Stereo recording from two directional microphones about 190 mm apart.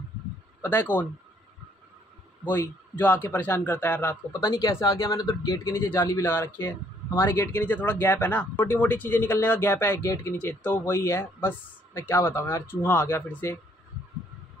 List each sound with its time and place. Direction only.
0.6 s speech: 10° left (ahead or behind)
2.4 s speech: 10° left (ahead or behind)